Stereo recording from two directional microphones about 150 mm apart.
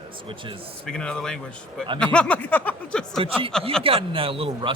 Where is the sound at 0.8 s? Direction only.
5° left (ahead or behind).